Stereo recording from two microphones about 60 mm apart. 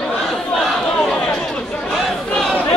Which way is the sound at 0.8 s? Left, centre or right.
Centre.